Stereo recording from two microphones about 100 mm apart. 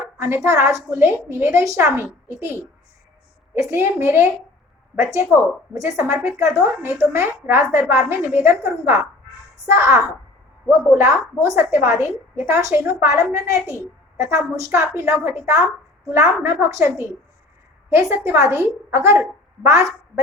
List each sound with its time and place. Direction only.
0.2 s a woman's voice: 25° right (ahead or behind)
3.5 s a woman's voice: 25° right (ahead or behind)
5.7 s a woman's voice: 30° right (ahead or behind)